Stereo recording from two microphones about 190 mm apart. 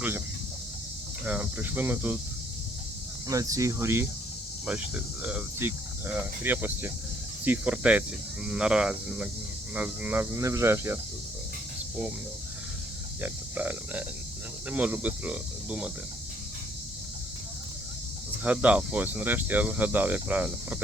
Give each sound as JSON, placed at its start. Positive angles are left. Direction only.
{"t": 1.2, "sound": "speech", "side_deg": -10}
{"t": 3.2, "sound": "speech", "side_deg": -15}
{"t": 13.2, "sound": "speech", "side_deg": -10}
{"t": 18.4, "sound": "speech", "side_deg": -10}